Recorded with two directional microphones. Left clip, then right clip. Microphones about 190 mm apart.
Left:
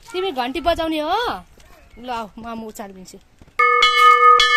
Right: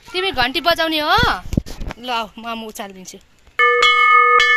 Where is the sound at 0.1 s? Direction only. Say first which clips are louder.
Right 4 dB; 15° left (ahead or behind).